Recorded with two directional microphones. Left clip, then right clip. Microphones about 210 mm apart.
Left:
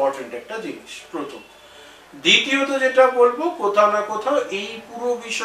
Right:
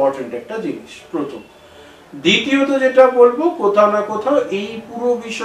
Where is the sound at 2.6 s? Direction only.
10° right (ahead or behind).